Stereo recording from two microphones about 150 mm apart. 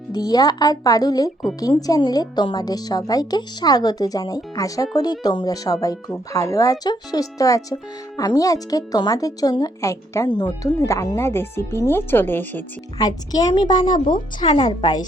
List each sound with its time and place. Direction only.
0.1 s speech: 25° left (ahead or behind)
13.0 s speech: 25° left (ahead or behind)